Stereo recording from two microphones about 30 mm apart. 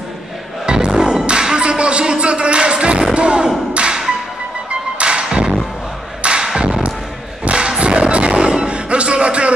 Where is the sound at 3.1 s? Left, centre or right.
Right.